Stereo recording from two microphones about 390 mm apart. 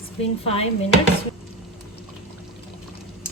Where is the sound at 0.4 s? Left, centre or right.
Centre.